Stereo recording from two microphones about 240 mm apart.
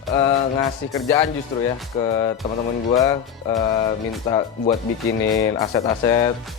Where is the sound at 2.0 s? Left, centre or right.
Centre.